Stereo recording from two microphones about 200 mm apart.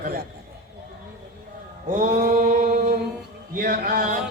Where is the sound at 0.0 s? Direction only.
50° right (ahead or behind).